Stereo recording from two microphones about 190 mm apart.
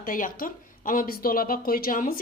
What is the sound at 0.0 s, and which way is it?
A woman's voice, 45° left (ahead or behind).